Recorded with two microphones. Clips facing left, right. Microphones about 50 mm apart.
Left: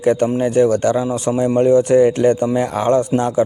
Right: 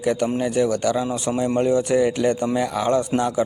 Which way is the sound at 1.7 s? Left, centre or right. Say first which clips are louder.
Left 9 dB; left.